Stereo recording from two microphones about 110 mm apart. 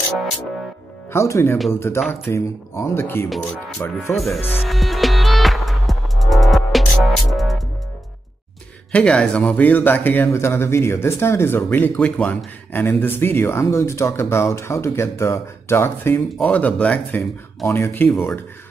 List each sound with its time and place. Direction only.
1.1 s speech: 25° left (ahead or behind)
2.0 s a man's voice: centre (ahead or behind)
2.3 s speech: 25° left (ahead or behind)
4.6 s music: centre (ahead or behind)
8.9 s speech: 10° left (ahead or behind)
17.6 s speech: 25° left (ahead or behind)